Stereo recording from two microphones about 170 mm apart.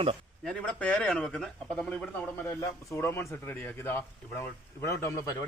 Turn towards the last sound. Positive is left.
turn(degrees=15)  # may be behind; listen again after turning